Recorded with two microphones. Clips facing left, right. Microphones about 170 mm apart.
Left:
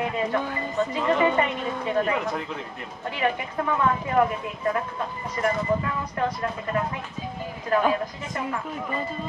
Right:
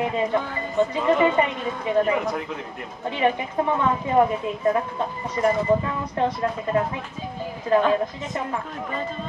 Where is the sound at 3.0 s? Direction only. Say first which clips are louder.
Right 4 dB; 25° right (ahead or behind).